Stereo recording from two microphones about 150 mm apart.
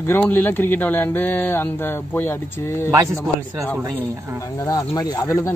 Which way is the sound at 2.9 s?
20° right (ahead or behind).